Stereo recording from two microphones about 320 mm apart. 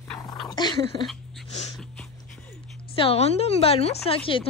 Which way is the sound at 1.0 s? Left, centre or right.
Centre.